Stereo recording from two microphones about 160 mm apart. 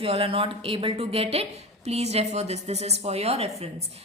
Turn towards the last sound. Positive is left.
turn(degrees=-40)  # may be behind; listen again after turning